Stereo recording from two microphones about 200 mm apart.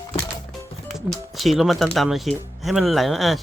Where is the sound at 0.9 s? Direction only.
Centre (ahead or behind).